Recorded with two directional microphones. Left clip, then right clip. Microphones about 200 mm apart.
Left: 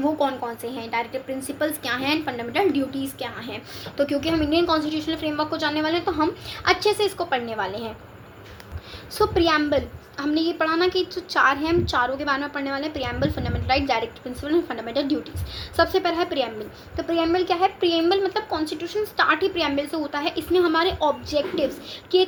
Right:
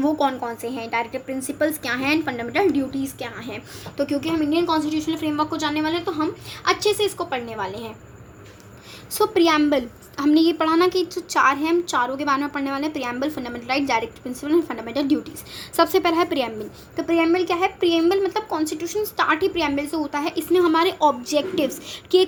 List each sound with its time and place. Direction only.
0.0 s a woman's voice: 35° right (ahead or behind)
3.9 s a woman's voice: 20° right (ahead or behind)
9.1 s a woman's voice: 30° right (ahead or behind)